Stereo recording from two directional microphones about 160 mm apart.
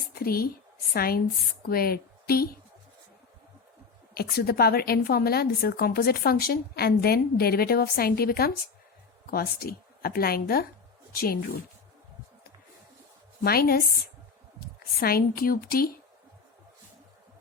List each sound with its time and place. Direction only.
0.1 s a woman's voice: 70° left (ahead or behind)
4.1 s a woman's voice: 75° left (ahead or behind)
13.4 s a woman's voice: 70° left (ahead or behind)
14.9 s a woman's voice: 70° left (ahead or behind)